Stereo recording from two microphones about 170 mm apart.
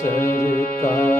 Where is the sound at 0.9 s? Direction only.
15° left (ahead or behind).